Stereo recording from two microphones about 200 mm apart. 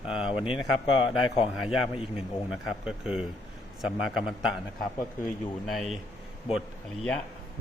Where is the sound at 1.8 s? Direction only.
25° left (ahead or behind).